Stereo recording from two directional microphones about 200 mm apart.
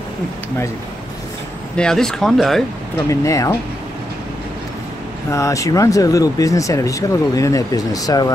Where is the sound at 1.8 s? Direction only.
5° left (ahead or behind).